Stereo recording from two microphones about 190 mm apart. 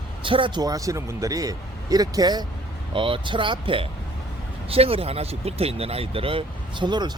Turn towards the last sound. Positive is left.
turn(degrees=-25)  # may be behind; listen again after turning